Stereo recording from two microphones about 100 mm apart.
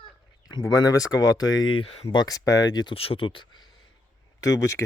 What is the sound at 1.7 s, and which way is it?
Speech, 70° left (ahead or behind).